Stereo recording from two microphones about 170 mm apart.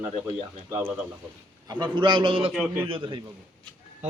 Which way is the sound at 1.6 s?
25° right (ahead or behind).